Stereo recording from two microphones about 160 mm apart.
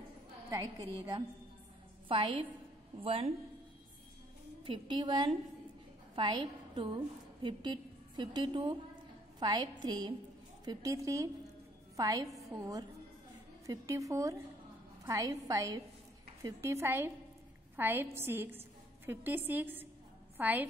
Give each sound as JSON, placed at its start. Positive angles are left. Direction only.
{"t": 0.5, "sound": "a woman's voice", "side_deg": -25}
{"t": 4.6, "sound": "a woman's voice", "side_deg": -30}